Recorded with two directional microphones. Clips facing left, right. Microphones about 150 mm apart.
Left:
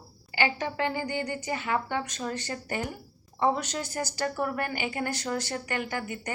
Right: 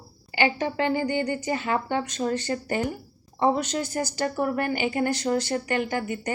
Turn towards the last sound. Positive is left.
turn(degrees=-25)  # may be behind; listen again after turning